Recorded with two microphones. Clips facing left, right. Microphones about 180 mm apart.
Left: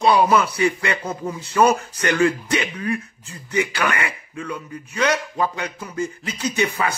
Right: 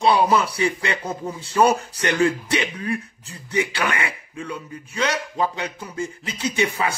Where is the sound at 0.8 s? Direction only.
30° right (ahead or behind).